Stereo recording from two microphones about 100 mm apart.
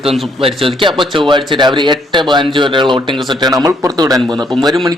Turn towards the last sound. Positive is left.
turn(degrees=-35)  # may be behind; listen again after turning